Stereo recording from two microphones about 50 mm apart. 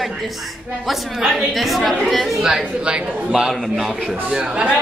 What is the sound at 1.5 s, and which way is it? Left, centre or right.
A man's voice, centre.